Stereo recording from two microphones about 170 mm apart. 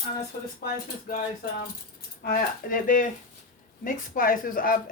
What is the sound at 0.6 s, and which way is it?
Speech, 55° left (ahead or behind).